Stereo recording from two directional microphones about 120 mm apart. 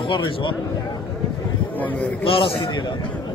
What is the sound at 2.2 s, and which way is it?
Speech, 50° left (ahead or behind).